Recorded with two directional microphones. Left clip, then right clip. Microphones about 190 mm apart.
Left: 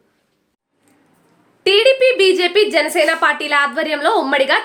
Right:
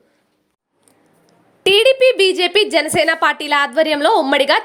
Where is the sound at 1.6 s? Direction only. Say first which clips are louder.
Right 1 dB; 30° right (ahead or behind).